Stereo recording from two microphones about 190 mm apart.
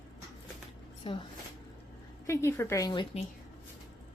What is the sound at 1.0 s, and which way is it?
Speech, 30° left (ahead or behind).